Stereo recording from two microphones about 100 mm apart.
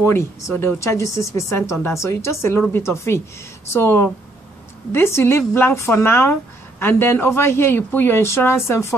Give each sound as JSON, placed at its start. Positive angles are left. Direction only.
{"t": 0.0, "sound": "speech", "side_deg": 25}